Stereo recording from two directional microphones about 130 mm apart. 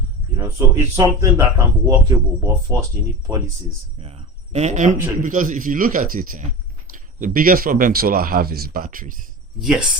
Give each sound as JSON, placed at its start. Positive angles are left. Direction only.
{"t": 0.9, "sound": "speech", "side_deg": -25}
{"t": 4.0, "sound": "speech", "side_deg": -55}
{"t": 5.2, "sound": "speech", "side_deg": -90}
{"t": 9.6, "sound": "speech", "side_deg": -5}